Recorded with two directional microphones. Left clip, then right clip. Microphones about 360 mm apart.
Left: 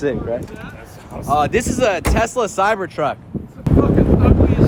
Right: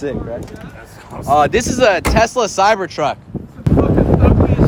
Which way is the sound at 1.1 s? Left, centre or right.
Centre.